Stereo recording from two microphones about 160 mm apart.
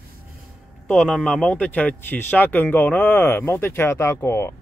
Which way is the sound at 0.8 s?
5° left (ahead or behind).